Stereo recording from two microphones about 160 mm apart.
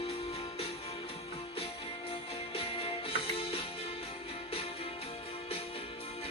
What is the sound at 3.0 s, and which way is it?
Music, 35° left (ahead or behind).